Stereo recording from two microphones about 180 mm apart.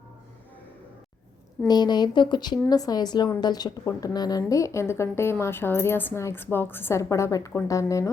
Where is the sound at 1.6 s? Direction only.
25° left (ahead or behind).